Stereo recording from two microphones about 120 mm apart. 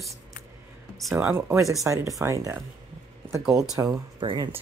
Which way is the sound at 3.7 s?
30° right (ahead or behind).